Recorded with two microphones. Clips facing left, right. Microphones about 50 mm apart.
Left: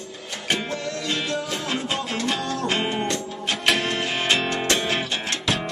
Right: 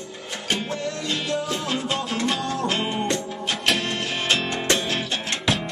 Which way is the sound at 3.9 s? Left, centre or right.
Left.